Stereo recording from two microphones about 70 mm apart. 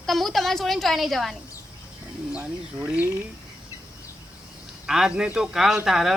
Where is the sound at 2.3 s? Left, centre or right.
Right.